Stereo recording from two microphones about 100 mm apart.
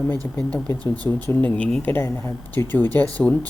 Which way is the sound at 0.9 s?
15° left (ahead or behind).